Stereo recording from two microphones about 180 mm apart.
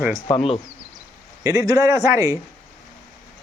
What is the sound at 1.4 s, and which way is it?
A man's voice, 15° right (ahead or behind).